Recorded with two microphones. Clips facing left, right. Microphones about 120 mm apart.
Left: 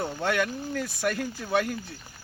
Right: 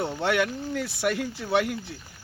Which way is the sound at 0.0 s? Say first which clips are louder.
Right 2 dB; 20° right (ahead or behind).